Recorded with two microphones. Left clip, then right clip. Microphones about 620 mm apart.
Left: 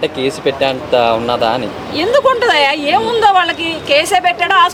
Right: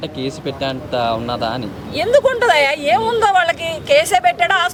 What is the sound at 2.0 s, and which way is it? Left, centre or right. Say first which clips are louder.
A woman's voice: left 2 dB; right.